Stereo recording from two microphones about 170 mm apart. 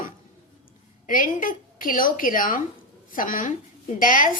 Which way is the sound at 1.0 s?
50° left (ahead or behind).